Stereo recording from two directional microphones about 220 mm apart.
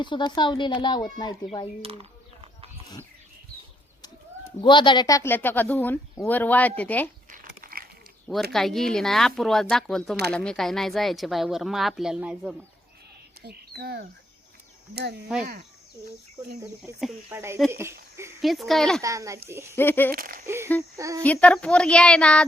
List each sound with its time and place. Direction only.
0.0 s speech: 20° left (ahead or behind)
1.8 s a sound: 25° right (ahead or behind)
4.6 s speech: 20° left (ahead or behind)
7.3 s crumpling: 40° right (ahead or behind)
8.5 s speech: centre (ahead or behind)
13.4 s speech: 45° right (ahead or behind)
15.4 s speech: 40° right (ahead or behind)
17.3 s speech: 10° right (ahead or behind)
18.4 s speech: centre (ahead or behind)
19.0 s speech: 15° right (ahead or behind)
19.7 s speech: 10° left (ahead or behind)
20.1 s speech: 40° right (ahead or behind)
20.9 s speech: 15° right (ahead or behind)
21.2 s speech: 5° left (ahead or behind)